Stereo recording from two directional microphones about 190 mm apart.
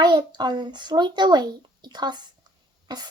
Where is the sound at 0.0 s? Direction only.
25° right (ahead or behind).